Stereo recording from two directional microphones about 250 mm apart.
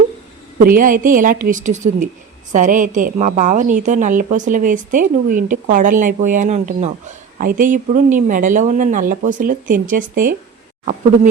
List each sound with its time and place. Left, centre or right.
0.6 s a woman's voice: right